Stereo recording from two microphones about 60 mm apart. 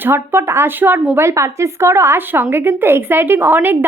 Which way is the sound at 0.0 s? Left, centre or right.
Right.